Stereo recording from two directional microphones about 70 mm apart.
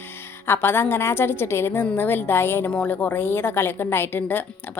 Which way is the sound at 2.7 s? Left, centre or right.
Left.